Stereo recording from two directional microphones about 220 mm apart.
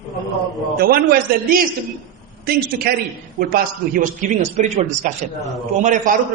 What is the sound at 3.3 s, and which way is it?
Speech, 40° right (ahead or behind).